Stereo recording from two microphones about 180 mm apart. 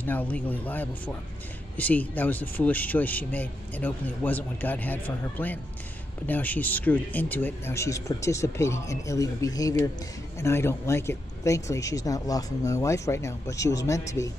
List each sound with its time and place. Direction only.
0.0 s speech: 10° left (ahead or behind)